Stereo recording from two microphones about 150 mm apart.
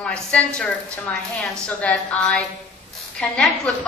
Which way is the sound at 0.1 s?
10° left (ahead or behind).